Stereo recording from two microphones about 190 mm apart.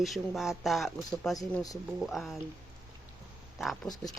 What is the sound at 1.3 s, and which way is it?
Speech, 20° left (ahead or behind).